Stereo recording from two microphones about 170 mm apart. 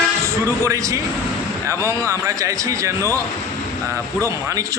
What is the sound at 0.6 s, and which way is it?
A man's voice, 20° right (ahead or behind).